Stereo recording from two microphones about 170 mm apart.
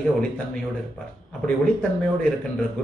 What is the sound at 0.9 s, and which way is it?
Speech, 5° left (ahead or behind).